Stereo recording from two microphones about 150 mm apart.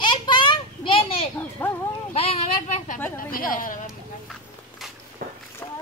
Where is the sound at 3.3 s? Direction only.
65° left (ahead or behind).